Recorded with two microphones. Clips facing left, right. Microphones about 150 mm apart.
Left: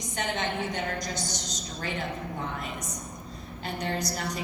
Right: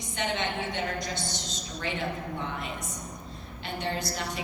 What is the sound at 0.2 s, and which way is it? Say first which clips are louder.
A woman's voice: even; 40° left (ahead or behind).